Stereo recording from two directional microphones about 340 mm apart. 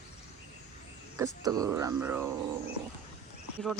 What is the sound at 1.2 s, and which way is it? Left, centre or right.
Speech, centre.